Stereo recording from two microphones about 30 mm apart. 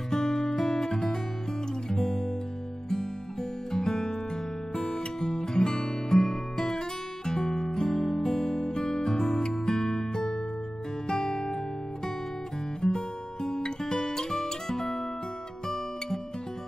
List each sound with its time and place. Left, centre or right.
0.1 s music: centre
1.9 s guitar: centre
3.7 s music: centre
7.4 s guitar: centre
8.6 s music: left
12.8 s music: left
13.7 s guitar: left